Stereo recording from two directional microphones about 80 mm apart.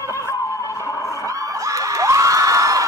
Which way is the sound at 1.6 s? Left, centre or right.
Right.